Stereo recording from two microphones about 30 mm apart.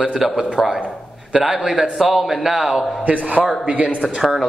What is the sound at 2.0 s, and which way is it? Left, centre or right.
Speech, centre.